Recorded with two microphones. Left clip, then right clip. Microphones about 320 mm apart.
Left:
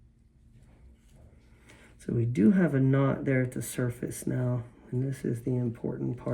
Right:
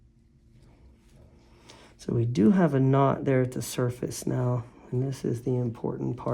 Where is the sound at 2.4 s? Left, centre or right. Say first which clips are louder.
Right 2 dB; right.